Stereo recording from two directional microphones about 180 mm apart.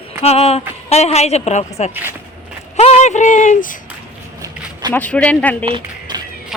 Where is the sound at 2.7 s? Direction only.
35° left (ahead or behind).